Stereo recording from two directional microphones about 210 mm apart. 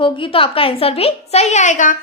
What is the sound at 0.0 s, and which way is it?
A woman's voice, 25° left (ahead or behind).